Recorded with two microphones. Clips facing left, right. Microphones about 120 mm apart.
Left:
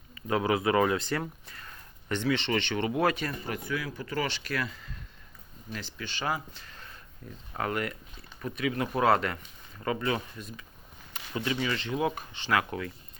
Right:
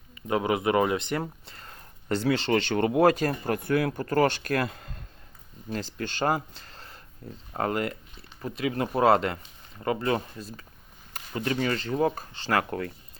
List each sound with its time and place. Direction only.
0.1 s speech: 20° right (ahead or behind); by 6.4 s 45° right (ahead or behind)
6.7 s a sound: 30° right (ahead or behind)
7.5 s speech: 30° right (ahead or behind)
11.4 s speech: 45° right (ahead or behind)